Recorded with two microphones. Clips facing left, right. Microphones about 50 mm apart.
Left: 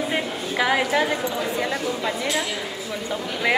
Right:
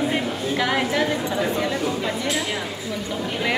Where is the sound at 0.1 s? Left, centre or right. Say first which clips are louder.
Right 2 dB; centre.